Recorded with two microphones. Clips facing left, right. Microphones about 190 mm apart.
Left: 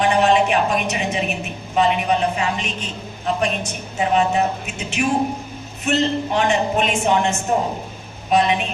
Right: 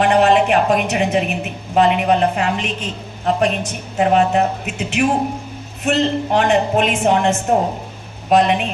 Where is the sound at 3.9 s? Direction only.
60° right (ahead or behind).